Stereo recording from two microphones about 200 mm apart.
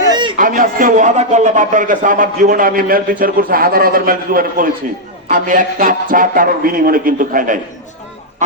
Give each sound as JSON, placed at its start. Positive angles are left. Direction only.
{"t": 0.1, "sound": "a sound", "side_deg": -25}
{"t": 0.3, "sound": "a man's voice", "side_deg": -40}
{"t": 8.4, "sound": "goose", "side_deg": -35}